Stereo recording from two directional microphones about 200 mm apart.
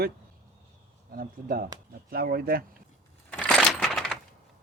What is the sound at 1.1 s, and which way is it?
Speech, 45° right (ahead or behind).